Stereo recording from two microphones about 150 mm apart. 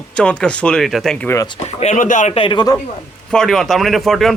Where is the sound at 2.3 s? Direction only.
35° left (ahead or behind).